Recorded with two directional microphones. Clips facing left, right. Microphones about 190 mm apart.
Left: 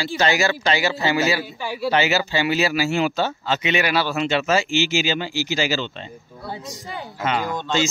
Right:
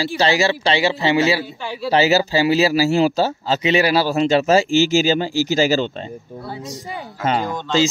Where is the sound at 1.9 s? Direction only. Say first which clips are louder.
Right 5 dB; 35° right (ahead or behind).